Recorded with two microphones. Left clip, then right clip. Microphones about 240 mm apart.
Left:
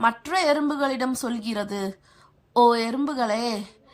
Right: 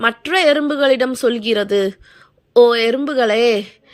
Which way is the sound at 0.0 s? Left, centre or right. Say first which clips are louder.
Right 7 dB; centre.